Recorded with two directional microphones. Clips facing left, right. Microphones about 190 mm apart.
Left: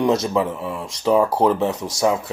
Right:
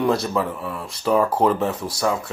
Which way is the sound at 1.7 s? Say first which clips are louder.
Even; 5° right (ahead or behind).